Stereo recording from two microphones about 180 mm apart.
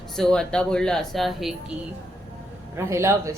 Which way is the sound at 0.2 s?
5° left (ahead or behind).